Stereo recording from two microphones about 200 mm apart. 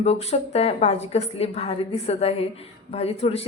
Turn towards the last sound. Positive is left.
turn(degrees=30)  # may be behind; listen again after turning